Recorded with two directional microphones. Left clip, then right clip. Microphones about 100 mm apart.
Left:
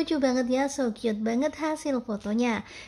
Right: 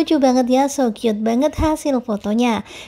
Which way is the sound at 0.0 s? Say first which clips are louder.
Right 10 dB; 45° right (ahead or behind).